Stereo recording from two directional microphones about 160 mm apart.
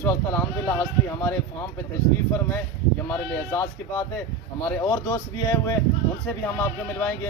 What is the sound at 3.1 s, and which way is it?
Speech, 15° left (ahead or behind).